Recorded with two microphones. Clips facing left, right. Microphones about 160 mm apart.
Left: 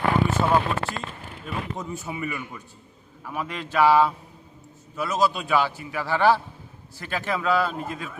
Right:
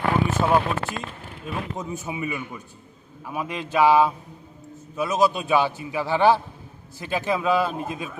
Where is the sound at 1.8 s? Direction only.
20° right (ahead or behind).